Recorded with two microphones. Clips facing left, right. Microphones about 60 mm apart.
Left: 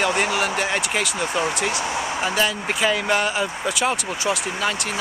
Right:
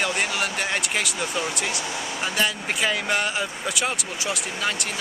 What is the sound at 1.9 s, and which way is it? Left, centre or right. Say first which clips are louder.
Speech: left 5 dB; left.